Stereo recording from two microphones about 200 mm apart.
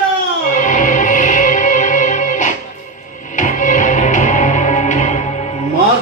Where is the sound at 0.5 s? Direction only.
40° left (ahead or behind).